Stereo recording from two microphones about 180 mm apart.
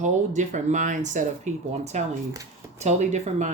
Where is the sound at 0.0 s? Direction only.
40° right (ahead or behind).